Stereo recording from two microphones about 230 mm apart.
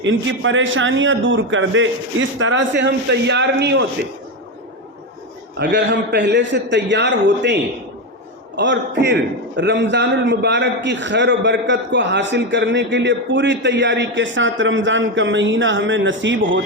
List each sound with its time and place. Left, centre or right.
0.0 s a man's voice: right
5.5 s a man's voice: right